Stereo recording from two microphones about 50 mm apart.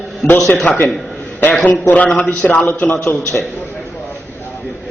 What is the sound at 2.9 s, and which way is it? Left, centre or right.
Speech, left.